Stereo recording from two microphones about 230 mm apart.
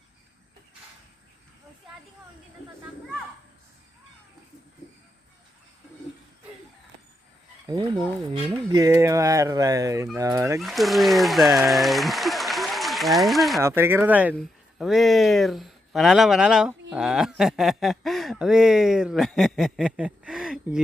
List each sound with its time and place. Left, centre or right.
7.7 s speech: centre
10.6 s speech: centre
13.6 s speech: centre